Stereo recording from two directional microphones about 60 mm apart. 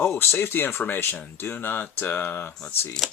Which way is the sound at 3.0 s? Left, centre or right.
Centre.